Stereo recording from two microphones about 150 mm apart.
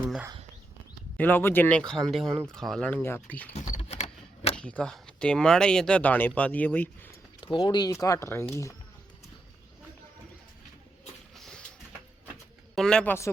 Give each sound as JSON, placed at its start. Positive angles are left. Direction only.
{"t": 0.0, "sound": "a sound", "side_deg": -5}
{"t": 1.1, "sound": "speech", "side_deg": 15}
{"t": 3.8, "sound": "typewriter", "side_deg": 45}
{"t": 4.5, "sound": "speech", "side_deg": 5}
{"t": 7.4, "sound": "speech", "side_deg": 30}
{"t": 11.3, "sound": "a sound", "side_deg": 5}
{"t": 12.7, "sound": "speech", "side_deg": 5}